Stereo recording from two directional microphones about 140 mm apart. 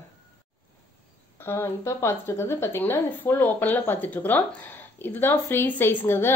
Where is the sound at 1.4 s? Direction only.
20° left (ahead or behind).